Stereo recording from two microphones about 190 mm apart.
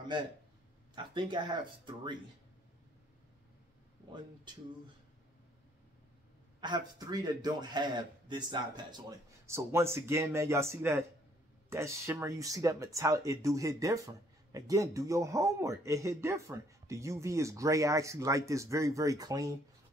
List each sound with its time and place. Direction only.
0.9 s a man's voice: 25° right (ahead or behind)
6.6 s a man's voice: 20° right (ahead or behind)